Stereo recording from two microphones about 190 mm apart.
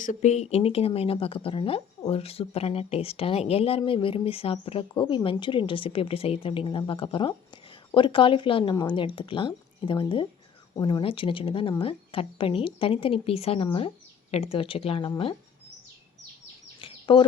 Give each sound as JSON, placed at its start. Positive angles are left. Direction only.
{"t": 0.0, "sound": "speech", "side_deg": 40}
{"t": 16.8, "sound": "bird", "side_deg": 25}